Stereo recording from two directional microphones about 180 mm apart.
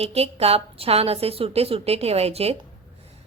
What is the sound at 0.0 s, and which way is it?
Speech, 35° right (ahead or behind).